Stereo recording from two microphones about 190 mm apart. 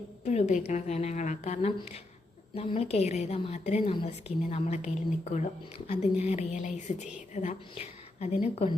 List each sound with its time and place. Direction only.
0.3 s speech: 35° left (ahead or behind)